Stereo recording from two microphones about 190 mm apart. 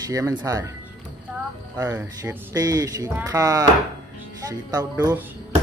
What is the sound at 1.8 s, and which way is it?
Speech, 10° right (ahead or behind).